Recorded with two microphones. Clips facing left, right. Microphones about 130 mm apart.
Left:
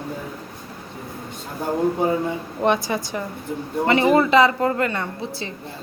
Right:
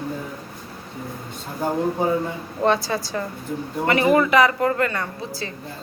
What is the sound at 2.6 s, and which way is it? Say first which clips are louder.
A woman's voice: even; 20° left (ahead or behind).